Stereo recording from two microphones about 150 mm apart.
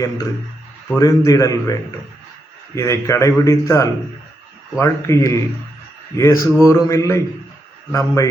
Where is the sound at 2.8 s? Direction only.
20° left (ahead or behind).